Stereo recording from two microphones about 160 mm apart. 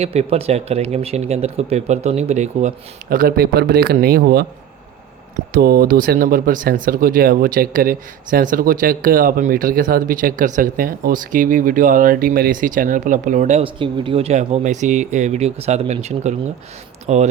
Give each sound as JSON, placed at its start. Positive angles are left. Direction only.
{"t": 0.0, "sound": "speech", "side_deg": -40}
{"t": 5.5, "sound": "speech", "side_deg": -70}
{"t": 13.7, "sound": "speech", "side_deg": -30}